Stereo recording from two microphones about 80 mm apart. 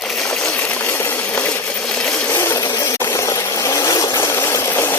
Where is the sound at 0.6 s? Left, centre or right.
Left.